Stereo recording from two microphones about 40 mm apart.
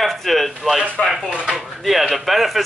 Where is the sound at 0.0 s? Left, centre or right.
Centre.